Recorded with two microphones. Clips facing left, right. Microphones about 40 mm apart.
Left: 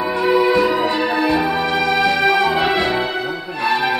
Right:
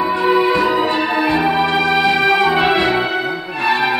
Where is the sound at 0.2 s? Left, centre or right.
Centre.